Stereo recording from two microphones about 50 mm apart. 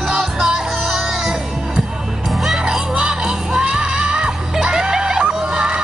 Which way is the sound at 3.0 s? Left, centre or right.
Centre.